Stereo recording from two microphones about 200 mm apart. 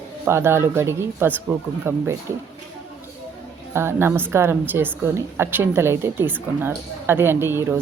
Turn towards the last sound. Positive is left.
turn(degrees=-10)  # may be behind; listen again after turning